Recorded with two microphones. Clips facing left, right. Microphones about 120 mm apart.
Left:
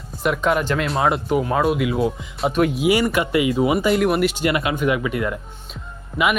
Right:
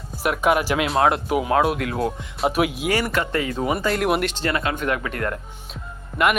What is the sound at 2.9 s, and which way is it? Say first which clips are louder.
Speech: left 4 dB; 15° left (ahead or behind).